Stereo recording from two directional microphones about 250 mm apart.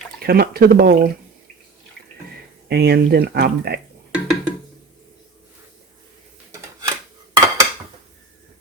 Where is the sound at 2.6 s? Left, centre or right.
Right.